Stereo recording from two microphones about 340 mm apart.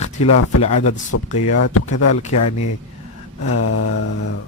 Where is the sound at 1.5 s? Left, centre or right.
Left.